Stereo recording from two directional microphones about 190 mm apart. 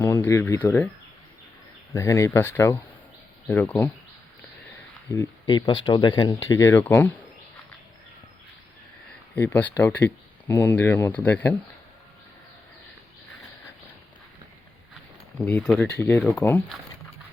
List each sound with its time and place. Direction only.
0.0 s speech: 10° left (ahead or behind)
1.9 s speech: 15° left (ahead or behind)
5.1 s speech: 15° left (ahead or behind)
9.3 s speech: 10° left (ahead or behind)
15.4 s speech: 5° left (ahead or behind)